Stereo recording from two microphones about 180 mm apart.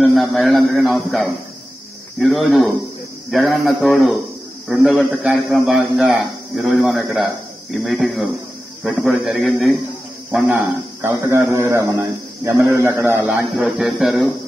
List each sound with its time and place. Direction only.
0.0 s a man's voice: centre (ahead or behind)